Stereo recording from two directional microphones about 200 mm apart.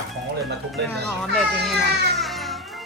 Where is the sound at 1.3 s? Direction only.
5° left (ahead or behind).